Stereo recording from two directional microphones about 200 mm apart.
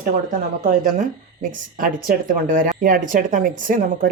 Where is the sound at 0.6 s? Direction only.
45° right (ahead or behind).